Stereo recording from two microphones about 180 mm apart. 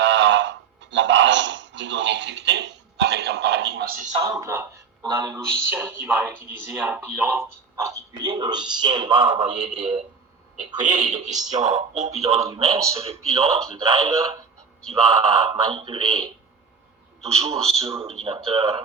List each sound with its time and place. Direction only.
0.0 s a sound: 85° right
3.1 s music: 70° right (ahead or behind); by 4.1 s 50° right (ahead or behind)
4.2 s speech: 20° right (ahead or behind)
9.5 s speech: 40° right (ahead or behind)
17.3 s speech: 35° right (ahead or behind)